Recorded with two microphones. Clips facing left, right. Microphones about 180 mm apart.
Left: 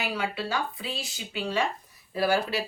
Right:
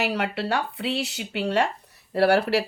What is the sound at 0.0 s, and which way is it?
Speech, 70° right (ahead or behind).